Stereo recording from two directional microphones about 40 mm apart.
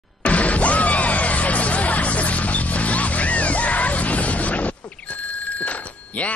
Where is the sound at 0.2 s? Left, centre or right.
Left.